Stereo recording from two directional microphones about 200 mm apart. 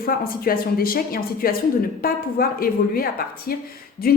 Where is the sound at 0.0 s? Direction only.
45° left (ahead or behind).